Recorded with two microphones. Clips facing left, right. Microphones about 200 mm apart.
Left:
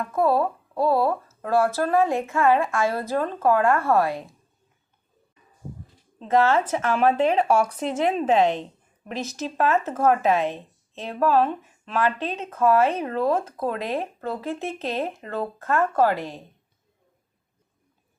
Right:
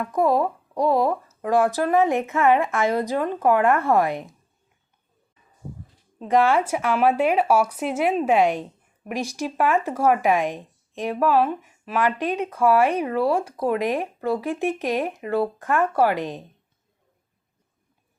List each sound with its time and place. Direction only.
0.0 s speech: 15° right (ahead or behind)
6.1 s speech: 15° right (ahead or behind)